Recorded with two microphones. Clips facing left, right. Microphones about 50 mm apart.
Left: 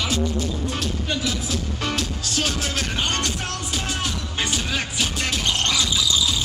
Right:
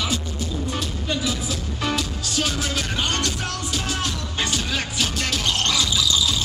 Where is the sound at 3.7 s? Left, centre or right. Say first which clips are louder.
Even; centre.